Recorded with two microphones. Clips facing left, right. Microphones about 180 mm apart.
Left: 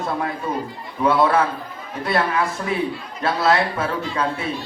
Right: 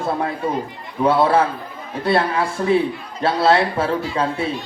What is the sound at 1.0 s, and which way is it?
A man's voice, 30° right (ahead or behind).